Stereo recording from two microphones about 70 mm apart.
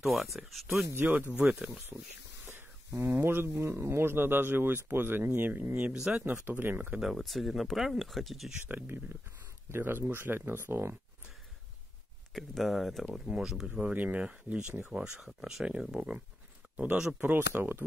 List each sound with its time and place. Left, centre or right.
0.0 s speech: centre
0.9 s speech: right
2.9 s speech: right
6.1 s speech: centre
7.0 s speech: centre
8.6 s speech: right
12.4 s speech: centre
13.2 s speech: centre
13.7 s speech: centre; by 17.8 s right